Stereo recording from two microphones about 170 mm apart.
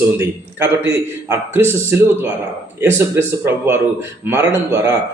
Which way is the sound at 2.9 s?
15° right (ahead or behind).